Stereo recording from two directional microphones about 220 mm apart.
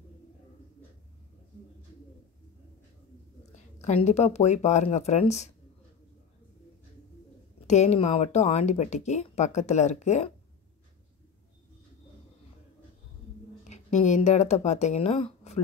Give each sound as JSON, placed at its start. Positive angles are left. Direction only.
{"t": 3.8, "sound": "speech", "side_deg": 30}
{"t": 7.6, "sound": "speech", "side_deg": 30}
{"t": 13.7, "sound": "speech", "side_deg": 30}